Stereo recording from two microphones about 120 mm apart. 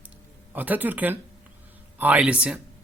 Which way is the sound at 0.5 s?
15° right (ahead or behind).